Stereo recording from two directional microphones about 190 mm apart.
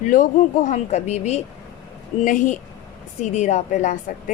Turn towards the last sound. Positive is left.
turn(degrees=40)  # may be behind; listen again after turning